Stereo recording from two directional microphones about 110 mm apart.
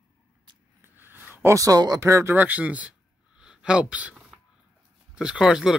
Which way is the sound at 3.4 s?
10° right (ahead or behind).